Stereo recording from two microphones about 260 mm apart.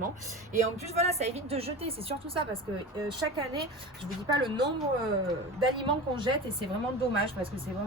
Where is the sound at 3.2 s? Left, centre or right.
Right.